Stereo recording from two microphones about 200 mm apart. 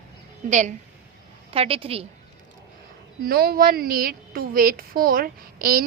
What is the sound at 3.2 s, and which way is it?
A woman's voice, 50° right (ahead or behind).